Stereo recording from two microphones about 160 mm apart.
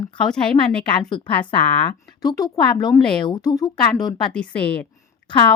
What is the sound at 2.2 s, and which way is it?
Speech, 25° left (ahead or behind).